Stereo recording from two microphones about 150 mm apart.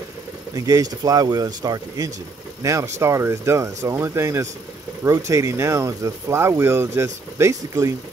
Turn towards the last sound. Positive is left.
turn(degrees=-20)  # may be behind; listen again after turning